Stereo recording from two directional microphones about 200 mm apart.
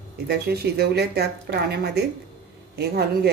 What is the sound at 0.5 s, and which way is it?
A woman's voice, 50° right (ahead or behind).